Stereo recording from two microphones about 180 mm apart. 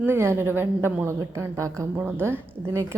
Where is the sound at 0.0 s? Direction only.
15° right (ahead or behind).